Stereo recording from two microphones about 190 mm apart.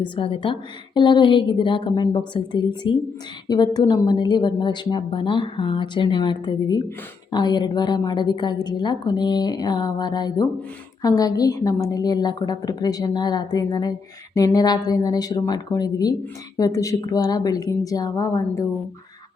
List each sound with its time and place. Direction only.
0.0 s speech: 25° left (ahead or behind)